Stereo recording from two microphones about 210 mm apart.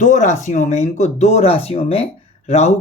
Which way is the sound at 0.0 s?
35° left (ahead or behind).